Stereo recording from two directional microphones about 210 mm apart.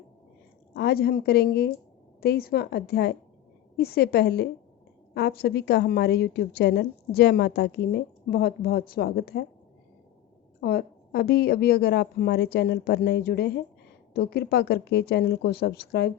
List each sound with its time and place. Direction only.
0.8 s a woman's voice: 50° left (ahead or behind)
10.6 s a woman's voice: 50° left (ahead or behind)